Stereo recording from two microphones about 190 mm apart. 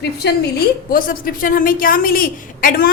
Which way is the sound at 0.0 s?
60° left (ahead or behind).